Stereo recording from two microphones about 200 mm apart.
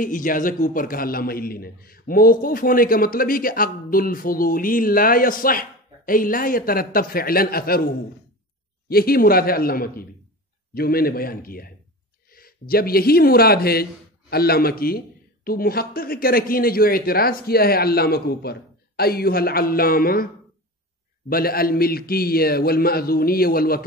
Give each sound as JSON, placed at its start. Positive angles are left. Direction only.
{"t": 0.0, "sound": "a man's voice", "side_deg": 40}
{"t": 21.3, "sound": "a man's voice", "side_deg": 50}